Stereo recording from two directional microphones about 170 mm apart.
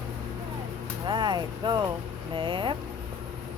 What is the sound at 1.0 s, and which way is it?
Speech, 25° right (ahead or behind).